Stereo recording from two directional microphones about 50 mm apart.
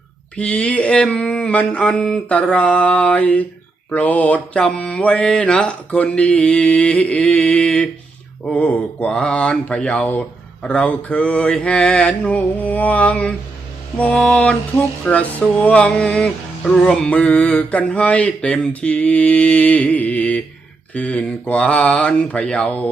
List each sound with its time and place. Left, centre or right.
0.3 s music: left
3.8 s speech: left
4.1 s mantra: left
4.5 s music: centre
5.2 s speech: centre
5.9 s music: left
9.0 s music: centre
12.4 s mantra: left
13.9 s music: left
14.2 s speech: centre
15.1 s music: left